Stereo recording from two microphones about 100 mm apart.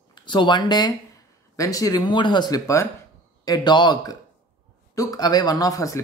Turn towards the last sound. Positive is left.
turn(degrees=35)  # may be behind; listen again after turning